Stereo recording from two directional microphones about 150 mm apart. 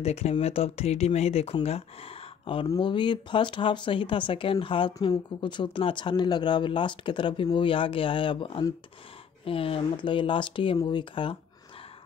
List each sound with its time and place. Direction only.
0.0 s speech: 45° left (ahead or behind)